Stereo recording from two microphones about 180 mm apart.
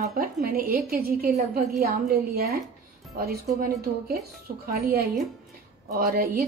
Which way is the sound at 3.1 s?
55° right (ahead or behind).